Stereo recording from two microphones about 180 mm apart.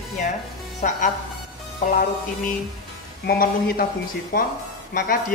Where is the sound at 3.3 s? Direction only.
55° left (ahead or behind).